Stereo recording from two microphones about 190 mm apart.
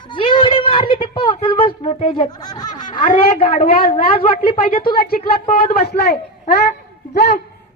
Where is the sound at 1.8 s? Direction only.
40° left (ahead or behind).